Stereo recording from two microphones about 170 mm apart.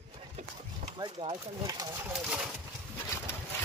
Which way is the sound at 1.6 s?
20° right (ahead or behind).